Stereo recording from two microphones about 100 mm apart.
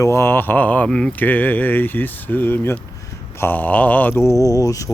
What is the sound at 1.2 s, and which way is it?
Speech, 20° left (ahead or behind).